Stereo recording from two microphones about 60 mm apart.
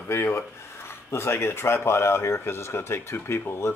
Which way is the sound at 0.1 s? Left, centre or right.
Left.